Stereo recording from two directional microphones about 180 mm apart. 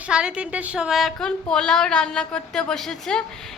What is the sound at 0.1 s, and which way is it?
A woman's voice, 5° right (ahead or behind).